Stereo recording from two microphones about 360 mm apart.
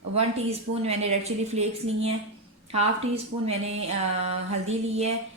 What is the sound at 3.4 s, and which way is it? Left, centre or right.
Speech, centre.